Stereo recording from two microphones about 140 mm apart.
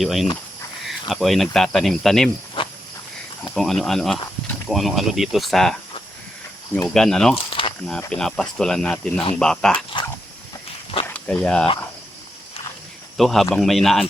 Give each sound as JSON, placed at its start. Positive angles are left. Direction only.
{"t": 0.0, "sound": "speech", "side_deg": 0}
{"t": 3.5, "sound": "speech", "side_deg": 5}
{"t": 6.8, "sound": "speech", "side_deg": 5}
{"t": 7.3, "sound": "snake", "side_deg": 40}
{"t": 7.9, "sound": "speech", "side_deg": 5}
{"t": 10.0, "sound": "dog", "side_deg": 35}
{"t": 11.0, "sound": "a sound", "side_deg": 10}
{"t": 13.1, "sound": "speech", "side_deg": 0}